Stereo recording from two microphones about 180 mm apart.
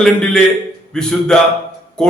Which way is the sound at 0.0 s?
5° left (ahead or behind).